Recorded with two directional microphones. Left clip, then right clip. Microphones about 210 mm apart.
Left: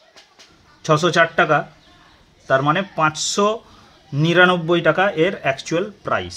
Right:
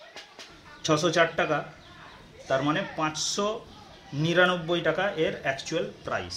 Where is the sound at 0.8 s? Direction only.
20° left (ahead or behind).